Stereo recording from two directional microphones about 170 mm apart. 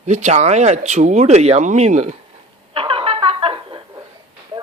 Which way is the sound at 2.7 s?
30° right (ahead or behind).